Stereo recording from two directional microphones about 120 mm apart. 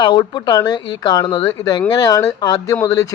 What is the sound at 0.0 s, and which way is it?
Speech, 40° left (ahead or behind).